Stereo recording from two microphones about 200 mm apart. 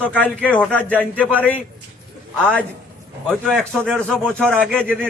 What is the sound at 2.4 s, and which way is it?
A man's voice, 5° left (ahead or behind).